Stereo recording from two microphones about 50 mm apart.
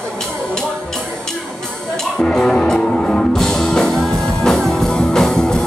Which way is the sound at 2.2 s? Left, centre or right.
Centre.